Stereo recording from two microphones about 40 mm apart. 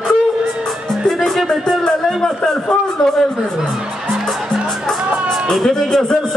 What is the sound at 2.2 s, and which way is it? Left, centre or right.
A man's voice, centre.